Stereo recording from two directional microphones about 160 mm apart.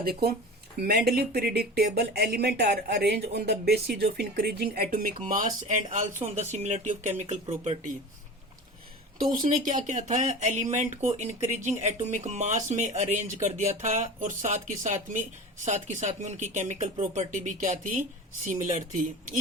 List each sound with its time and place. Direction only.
0.0 s speech: 70° right (ahead or behind)
0.8 s speech: 85° right
5.2 s speech: 55° right (ahead or behind)
9.1 s speech: 55° right (ahead or behind)